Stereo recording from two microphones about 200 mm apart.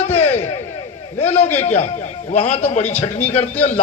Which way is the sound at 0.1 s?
35° left (ahead or behind).